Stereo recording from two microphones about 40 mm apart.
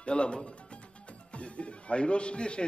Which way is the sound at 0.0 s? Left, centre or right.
Left.